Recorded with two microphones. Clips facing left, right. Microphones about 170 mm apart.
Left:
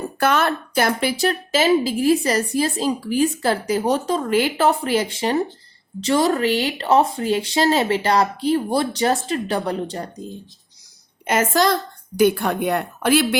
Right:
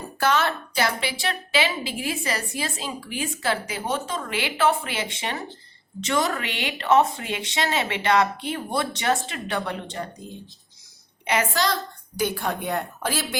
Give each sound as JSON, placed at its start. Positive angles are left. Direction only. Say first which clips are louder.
{"t": 0.2, "sound": "a woman's voice", "louder": "left 3 dB", "side_deg": 55}
{"t": 11.3, "sound": "a woman's voice", "louder": "left 6 dB", "side_deg": 50}